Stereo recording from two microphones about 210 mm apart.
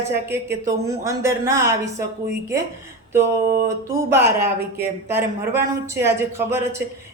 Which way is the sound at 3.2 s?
45° right (ahead or behind).